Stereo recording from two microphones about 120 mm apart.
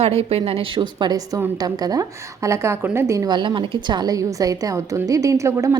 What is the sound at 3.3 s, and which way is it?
A woman's voice, 40° right (ahead or behind).